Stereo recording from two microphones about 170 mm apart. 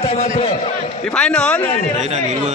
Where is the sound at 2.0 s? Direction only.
40° right (ahead or behind).